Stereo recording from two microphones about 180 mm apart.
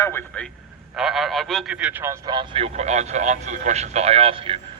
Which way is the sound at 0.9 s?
Centre (ahead or behind).